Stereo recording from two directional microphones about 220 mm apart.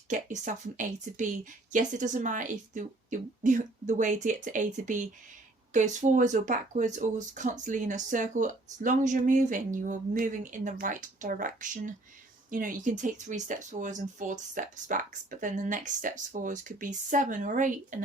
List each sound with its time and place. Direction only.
0.1 s speech: 35° right (ahead or behind)